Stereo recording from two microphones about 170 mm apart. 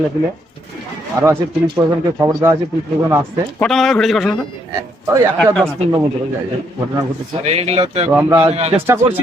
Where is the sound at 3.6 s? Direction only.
Centre (ahead or behind).